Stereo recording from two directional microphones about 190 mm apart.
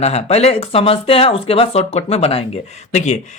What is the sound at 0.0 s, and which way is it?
Speech, 35° left (ahead or behind).